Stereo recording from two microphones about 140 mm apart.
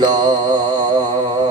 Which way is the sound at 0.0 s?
30° right (ahead or behind).